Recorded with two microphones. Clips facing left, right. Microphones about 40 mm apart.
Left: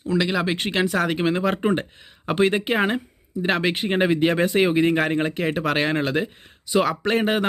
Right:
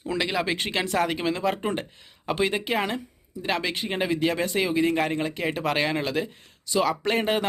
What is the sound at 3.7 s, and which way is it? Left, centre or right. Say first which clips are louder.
Speech: left 6 dB; left.